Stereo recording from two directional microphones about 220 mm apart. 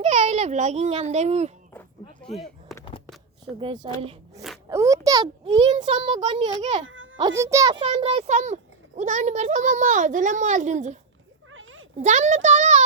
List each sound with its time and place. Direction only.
0.0 s a child's voice: 30° right (ahead or behind)
2.7 s a sound: centre (ahead or behind)
3.5 s a child's voice: 25° right (ahead or behind)
6.8 s music: 60° right (ahead or behind)
7.2 s a child's voice: 15° right (ahead or behind); by 10.9 s 35° right (ahead or behind)
11.5 s a sound: 65° right (ahead or behind)
11.9 s a child's voice: 30° right (ahead or behind)